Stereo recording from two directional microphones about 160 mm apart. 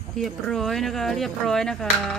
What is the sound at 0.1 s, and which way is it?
Speech, centre (ahead or behind).